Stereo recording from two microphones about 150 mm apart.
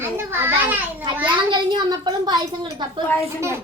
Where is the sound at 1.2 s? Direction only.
30° right (ahead or behind).